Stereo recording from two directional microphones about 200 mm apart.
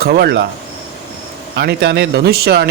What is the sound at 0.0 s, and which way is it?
Speech, 55° right (ahead or behind).